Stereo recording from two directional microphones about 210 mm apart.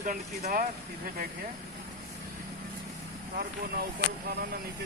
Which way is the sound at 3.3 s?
45° right (ahead or behind).